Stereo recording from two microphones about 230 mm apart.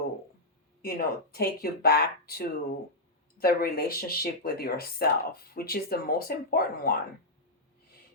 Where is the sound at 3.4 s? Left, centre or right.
Left.